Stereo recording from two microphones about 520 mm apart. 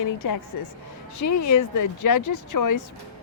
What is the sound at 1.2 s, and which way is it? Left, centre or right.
Speech, left.